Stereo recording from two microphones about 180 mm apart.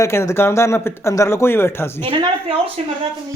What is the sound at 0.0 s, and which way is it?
Speech, 15° left (ahead or behind).